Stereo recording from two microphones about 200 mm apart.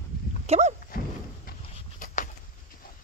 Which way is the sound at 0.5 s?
35° right (ahead or behind).